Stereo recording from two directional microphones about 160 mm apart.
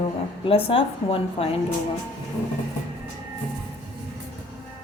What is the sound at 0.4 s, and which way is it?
A woman's voice, 35° left (ahead or behind).